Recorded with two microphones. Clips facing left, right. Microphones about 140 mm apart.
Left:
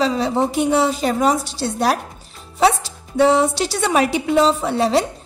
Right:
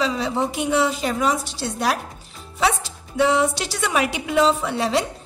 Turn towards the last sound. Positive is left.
turn(degrees=35)  # may be behind; listen again after turning